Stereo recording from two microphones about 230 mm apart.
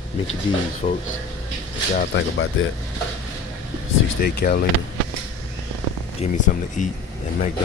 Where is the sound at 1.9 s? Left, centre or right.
Left.